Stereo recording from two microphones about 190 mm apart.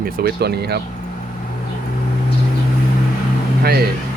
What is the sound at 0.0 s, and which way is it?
Speech, 55° right (ahead or behind).